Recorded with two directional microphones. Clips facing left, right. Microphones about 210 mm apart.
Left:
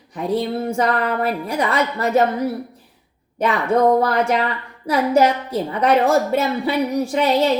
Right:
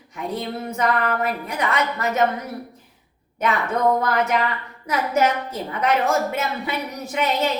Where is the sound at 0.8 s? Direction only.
35° left (ahead or behind).